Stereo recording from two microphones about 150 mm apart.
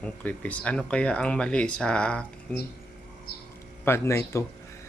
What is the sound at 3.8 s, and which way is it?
Speech, 15° left (ahead or behind).